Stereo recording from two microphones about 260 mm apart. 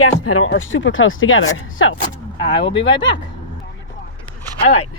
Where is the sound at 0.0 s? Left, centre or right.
Left.